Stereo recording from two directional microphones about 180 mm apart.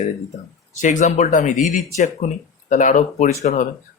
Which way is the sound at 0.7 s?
45° left (ahead or behind).